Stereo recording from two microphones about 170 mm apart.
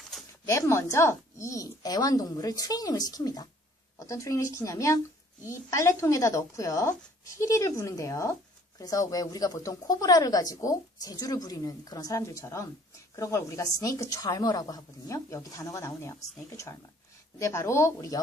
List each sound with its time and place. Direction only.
0.4 s a woman's voice: 15° left (ahead or behind)